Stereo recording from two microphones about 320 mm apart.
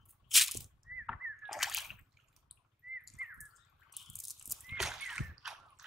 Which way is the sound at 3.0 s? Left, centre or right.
Centre.